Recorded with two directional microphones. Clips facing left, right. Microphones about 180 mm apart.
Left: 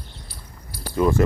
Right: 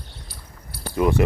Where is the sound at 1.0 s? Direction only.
15° right (ahead or behind).